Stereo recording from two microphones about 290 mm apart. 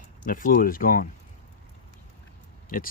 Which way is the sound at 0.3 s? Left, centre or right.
Left.